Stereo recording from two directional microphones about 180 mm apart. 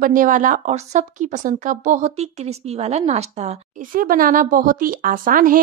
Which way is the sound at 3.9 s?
50° right (ahead or behind).